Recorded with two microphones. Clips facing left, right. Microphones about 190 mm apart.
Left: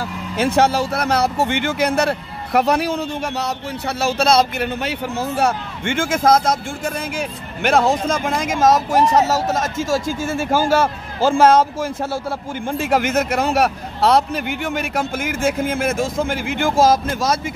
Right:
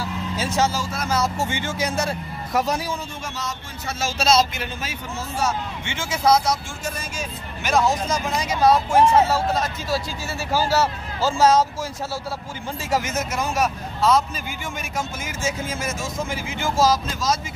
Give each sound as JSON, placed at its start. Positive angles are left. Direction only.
{"t": 0.0, "sound": "speech", "side_deg": 60}